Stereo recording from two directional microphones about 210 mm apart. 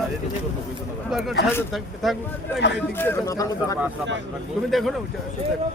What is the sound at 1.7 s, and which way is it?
Speech, centre (ahead or behind).